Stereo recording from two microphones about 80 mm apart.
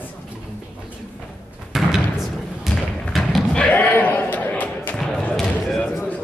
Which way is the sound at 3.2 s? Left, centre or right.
Centre.